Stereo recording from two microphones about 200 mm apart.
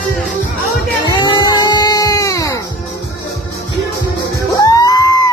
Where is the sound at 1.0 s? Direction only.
20° left (ahead or behind).